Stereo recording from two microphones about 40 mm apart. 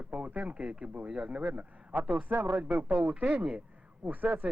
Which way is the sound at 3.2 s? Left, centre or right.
Right.